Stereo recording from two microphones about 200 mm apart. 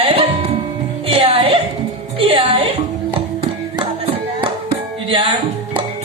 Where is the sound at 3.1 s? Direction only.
25° right (ahead or behind).